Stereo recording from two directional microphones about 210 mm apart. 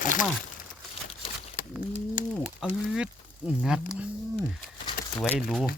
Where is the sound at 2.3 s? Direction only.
Centre (ahead or behind).